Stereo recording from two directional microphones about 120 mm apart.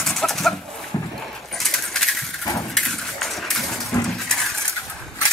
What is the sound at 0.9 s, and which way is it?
Dog, 30° left (ahead or behind).